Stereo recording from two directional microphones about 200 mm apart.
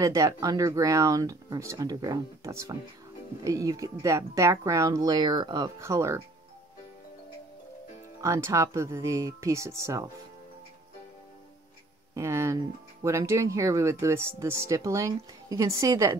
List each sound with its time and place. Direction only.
0.0 s speech: 15° right (ahead or behind)
8.2 s speech: 15° right (ahead or behind)
12.1 s speech: 15° right (ahead or behind)